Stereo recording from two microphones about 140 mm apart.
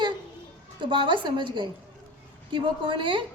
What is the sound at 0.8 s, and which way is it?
A woman's voice, 35° right (ahead or behind).